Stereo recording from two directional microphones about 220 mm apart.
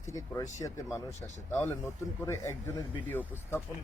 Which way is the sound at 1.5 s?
10° left (ahead or behind).